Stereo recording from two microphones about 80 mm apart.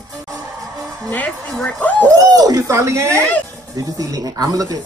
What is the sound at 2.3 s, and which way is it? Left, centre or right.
Speech, right.